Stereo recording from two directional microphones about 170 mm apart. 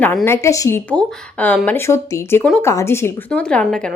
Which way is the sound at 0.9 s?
5° left (ahead or behind).